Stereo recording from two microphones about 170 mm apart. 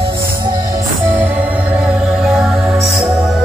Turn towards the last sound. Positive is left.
turn(degrees=-5)  # may be behind; listen again after turning